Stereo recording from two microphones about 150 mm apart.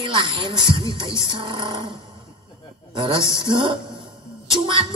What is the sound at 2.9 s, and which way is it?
Speech, 35° right (ahead or behind).